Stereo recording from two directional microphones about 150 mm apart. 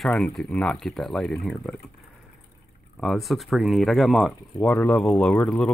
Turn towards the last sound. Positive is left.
turn(degrees=5)  # may be behind; listen again after turning